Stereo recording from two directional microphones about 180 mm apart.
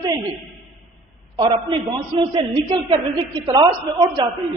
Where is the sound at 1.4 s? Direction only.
25° right (ahead or behind).